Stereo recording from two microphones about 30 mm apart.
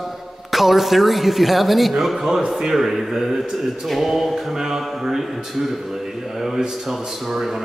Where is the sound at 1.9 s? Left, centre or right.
Centre.